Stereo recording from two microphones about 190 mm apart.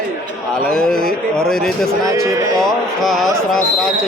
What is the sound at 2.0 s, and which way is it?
Speech, 15° right (ahead or behind).